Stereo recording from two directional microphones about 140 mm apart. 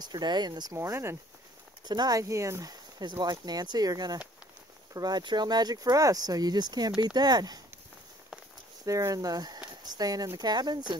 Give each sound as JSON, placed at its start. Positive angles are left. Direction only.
{"t": 0.0, "sound": "speech", "side_deg": -30}
{"t": 8.8, "sound": "speech", "side_deg": -25}